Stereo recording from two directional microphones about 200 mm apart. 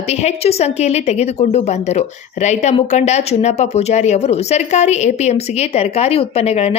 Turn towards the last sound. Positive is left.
turn(degrees=30)  # may be behind; listen again after turning